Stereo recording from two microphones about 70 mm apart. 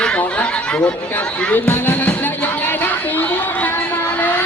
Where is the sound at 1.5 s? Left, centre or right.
Left.